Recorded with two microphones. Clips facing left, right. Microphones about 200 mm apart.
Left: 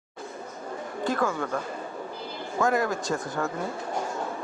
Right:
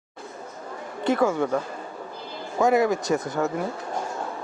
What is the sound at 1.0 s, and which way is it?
Speech, 20° right (ahead or behind).